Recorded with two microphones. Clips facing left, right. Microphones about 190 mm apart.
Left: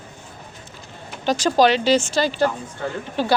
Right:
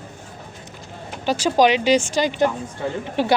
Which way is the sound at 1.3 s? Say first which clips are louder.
Even; 10° right (ahead or behind).